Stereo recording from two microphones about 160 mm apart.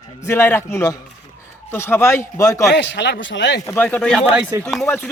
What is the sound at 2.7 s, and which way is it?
Speech, 90° left.